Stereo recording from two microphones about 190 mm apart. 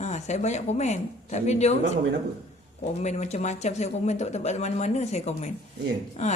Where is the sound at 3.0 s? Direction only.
35° left (ahead or behind).